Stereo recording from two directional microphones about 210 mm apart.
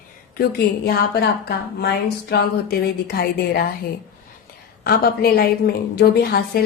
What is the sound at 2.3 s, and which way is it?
A woman's voice, 45° left (ahead or behind).